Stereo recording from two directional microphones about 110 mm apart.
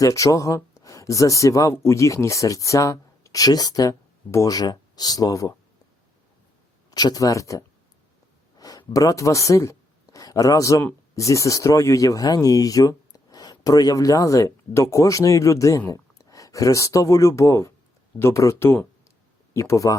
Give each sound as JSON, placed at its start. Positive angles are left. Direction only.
{"t": 0.0, "sound": "speech", "side_deg": 30}
{"t": 6.9, "sound": "speech", "side_deg": 35}
{"t": 8.5, "sound": "a sound", "side_deg": 35}
{"t": 8.9, "sound": "speech", "side_deg": 30}